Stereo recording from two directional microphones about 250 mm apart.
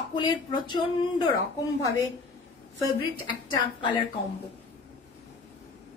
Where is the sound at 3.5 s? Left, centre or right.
Centre.